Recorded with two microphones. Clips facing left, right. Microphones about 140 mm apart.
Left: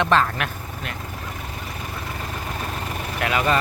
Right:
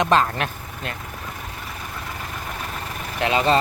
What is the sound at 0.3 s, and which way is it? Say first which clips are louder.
Speech: right 1 dB; 30° right (ahead or behind).